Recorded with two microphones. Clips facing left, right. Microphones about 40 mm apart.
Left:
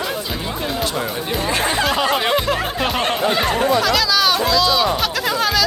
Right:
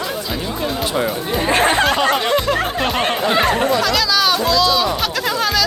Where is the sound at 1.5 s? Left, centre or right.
Right.